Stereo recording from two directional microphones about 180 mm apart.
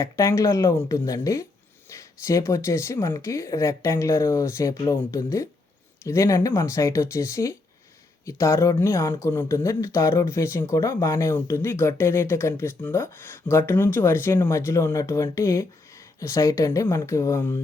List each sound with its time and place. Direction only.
0.0 s speech: 15° left (ahead or behind)